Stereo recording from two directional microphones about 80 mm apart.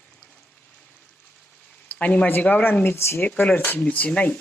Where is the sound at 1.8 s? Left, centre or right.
Centre.